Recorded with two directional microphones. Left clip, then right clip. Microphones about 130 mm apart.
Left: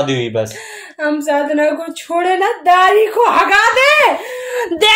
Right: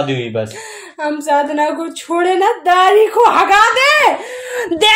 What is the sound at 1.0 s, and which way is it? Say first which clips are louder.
A woman's voice: right 1 dB; 30° right (ahead or behind).